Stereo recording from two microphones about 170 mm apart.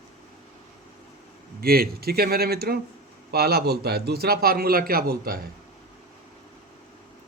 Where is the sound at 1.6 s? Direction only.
60° right (ahead or behind).